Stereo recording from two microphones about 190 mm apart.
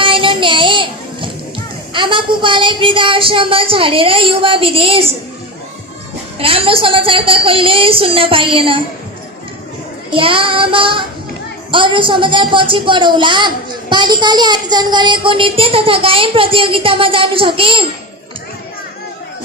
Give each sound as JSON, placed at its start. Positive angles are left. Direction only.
{"t": 0.0, "sound": "child singing", "side_deg": -25}
{"t": 1.9, "sound": "a woman's voice", "side_deg": -25}
{"t": 6.4, "sound": "a woman's voice", "side_deg": -30}
{"t": 10.1, "sound": "a woman's voice", "side_deg": -30}